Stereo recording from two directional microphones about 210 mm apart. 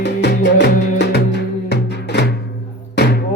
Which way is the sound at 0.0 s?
55° left (ahead or behind).